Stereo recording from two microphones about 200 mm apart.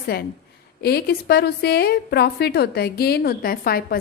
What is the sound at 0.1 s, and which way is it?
A woman's voice, 50° left (ahead or behind).